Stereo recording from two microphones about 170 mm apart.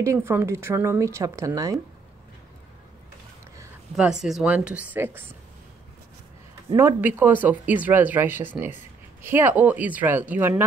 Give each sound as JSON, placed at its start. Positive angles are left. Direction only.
{"t": 0.0, "sound": "speech", "side_deg": -15}
{"t": 3.9, "sound": "speech", "side_deg": -5}
{"t": 6.7, "sound": "speech", "side_deg": -15}